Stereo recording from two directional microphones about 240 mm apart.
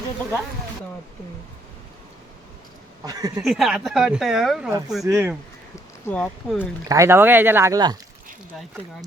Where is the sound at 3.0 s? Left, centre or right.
Centre.